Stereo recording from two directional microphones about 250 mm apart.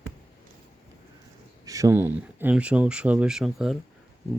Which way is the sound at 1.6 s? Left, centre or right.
Centre.